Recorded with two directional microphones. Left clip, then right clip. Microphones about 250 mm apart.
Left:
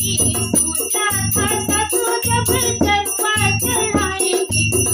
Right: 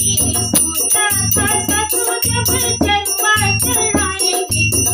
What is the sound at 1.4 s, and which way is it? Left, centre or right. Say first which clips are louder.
Jingle bell: right 2 dB; centre.